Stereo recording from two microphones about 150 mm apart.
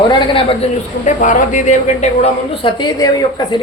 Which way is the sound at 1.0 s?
55° left (ahead or behind).